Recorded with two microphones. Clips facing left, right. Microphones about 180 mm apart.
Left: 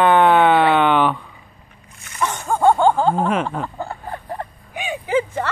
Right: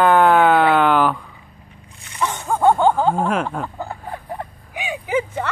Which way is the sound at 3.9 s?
10° right (ahead or behind).